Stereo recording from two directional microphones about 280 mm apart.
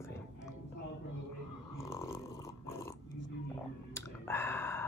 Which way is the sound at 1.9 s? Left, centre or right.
Centre.